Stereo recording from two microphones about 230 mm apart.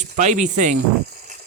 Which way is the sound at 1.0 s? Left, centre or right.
Right.